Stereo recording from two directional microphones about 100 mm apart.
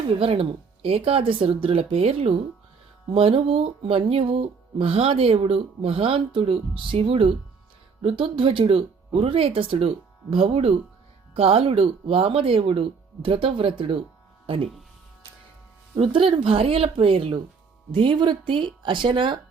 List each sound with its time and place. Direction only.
0.2 s speech: 65° right (ahead or behind)
16.0 s speech: 60° right (ahead or behind)